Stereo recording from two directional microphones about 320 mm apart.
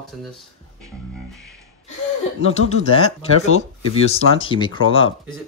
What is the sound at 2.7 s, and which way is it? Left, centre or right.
Speech, centre.